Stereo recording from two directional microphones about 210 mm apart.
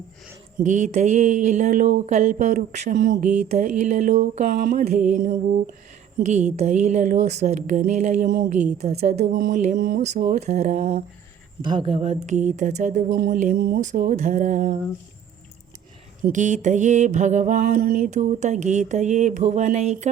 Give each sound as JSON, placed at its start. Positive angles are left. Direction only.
{"t": 0.6, "sound": "speech", "side_deg": -35}
{"t": 16.2, "sound": "speech", "side_deg": -35}